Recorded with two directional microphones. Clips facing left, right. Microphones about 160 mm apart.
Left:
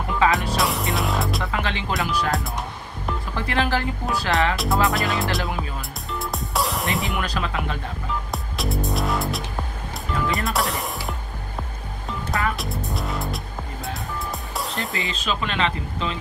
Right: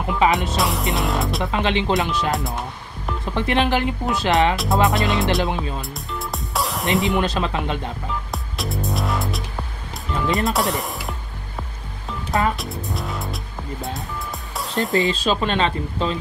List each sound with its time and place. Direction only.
0.2 s speech: 20° right (ahead or behind)
0.6 s music: centre (ahead or behind)
1.4 s speech: 20° right (ahead or behind)
2.3 s music: centre (ahead or behind)
3.3 s speech: 20° right (ahead or behind)
5.8 s music: centre (ahead or behind)
7.2 s speech: 25° right (ahead or behind)
8.3 s music: centre (ahead or behind)
10.2 s speech: 20° right (ahead or behind)
10.5 s speech: centre (ahead or behind)
12.3 s speech: 20° right (ahead or behind)
12.5 s music: centre (ahead or behind)
14.6 s music: centre (ahead or behind)
14.9 s speech: 35° right (ahead or behind)